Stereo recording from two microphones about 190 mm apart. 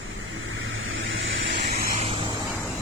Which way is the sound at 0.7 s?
90° right.